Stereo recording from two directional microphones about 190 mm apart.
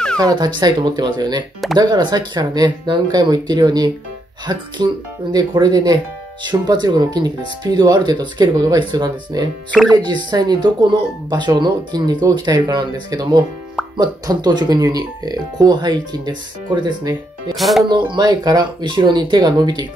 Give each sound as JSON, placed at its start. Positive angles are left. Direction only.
{"t": 0.2, "sound": "speech", "side_deg": -20}
{"t": 17.6, "sound": "speech", "side_deg": 0}
{"t": 17.8, "sound": "speech", "side_deg": -25}